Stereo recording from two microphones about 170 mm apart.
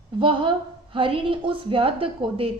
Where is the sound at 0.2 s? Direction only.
30° right (ahead or behind).